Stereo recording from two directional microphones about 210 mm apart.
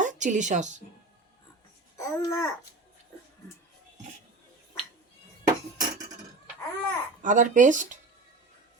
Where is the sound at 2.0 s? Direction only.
15° left (ahead or behind).